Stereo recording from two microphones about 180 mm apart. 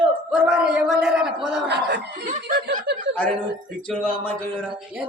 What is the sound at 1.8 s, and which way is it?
Speech, 70° right (ahead or behind).